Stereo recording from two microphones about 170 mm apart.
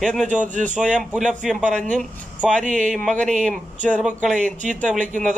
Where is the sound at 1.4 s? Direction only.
5° right (ahead or behind).